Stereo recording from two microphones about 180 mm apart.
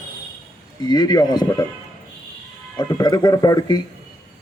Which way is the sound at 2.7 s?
20° left (ahead or behind).